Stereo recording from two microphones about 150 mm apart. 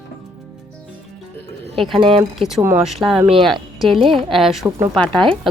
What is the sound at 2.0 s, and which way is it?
Speech, 40° right (ahead or behind).